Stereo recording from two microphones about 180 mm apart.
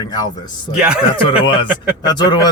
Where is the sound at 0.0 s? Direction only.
25° left (ahead or behind).